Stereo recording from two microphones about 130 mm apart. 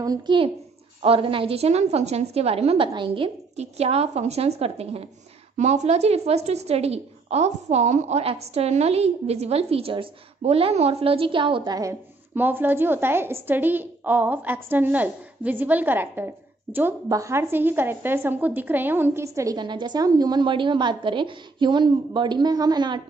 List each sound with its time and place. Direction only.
0.0 s speech: 30° right (ahead or behind)
1.0 s a woman's voice: 45° right (ahead or behind)
2.9 s a woman's voice: 35° right (ahead or behind)
3.5 s a woman's voice: 55° right (ahead or behind)
5.6 s a woman's voice: 60° right (ahead or behind); by 12.0 s 30° right (ahead or behind)
12.4 s a woman's voice: 15° right (ahead or behind); by 23.0 s 35° right (ahead or behind)